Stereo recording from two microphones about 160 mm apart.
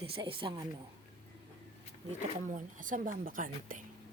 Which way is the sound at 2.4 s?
55° right (ahead or behind).